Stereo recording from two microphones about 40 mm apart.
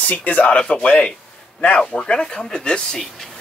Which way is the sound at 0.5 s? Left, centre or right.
Left.